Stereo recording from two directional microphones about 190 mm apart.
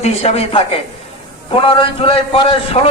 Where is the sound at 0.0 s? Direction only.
35° left (ahead or behind).